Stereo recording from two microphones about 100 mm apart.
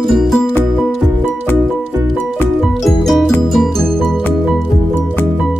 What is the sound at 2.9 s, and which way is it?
Music, centre (ahead or behind).